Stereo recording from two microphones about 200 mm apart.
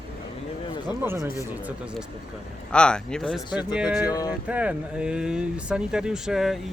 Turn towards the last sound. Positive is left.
turn(degrees=0)  # may be behind; listen again after turning